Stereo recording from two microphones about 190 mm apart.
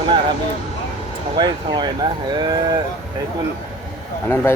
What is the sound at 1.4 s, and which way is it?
Speech, 20° right (ahead or behind).